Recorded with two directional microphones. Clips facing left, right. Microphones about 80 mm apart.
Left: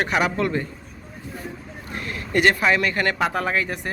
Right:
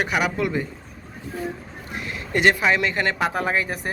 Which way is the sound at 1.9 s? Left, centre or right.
Centre.